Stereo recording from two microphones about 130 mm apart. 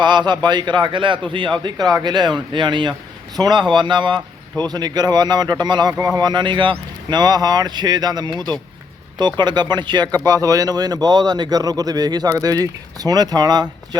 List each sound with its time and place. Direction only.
0.0 s a man's voice: 35° right (ahead or behind)